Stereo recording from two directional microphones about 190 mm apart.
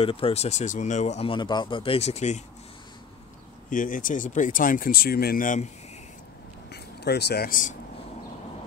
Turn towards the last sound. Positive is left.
turn(degrees=45)  # may be behind; listen again after turning